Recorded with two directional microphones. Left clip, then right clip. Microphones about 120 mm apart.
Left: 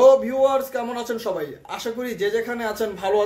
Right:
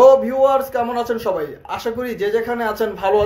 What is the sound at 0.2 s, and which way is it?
Speech, 25° left (ahead or behind).